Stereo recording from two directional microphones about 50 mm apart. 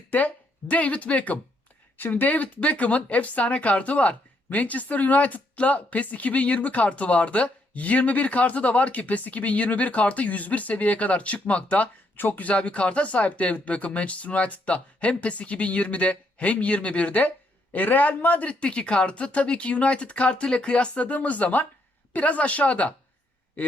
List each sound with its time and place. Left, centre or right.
0.1 s speech: left